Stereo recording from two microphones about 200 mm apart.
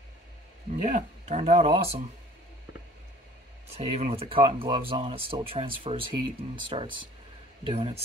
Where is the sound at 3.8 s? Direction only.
30° right (ahead or behind).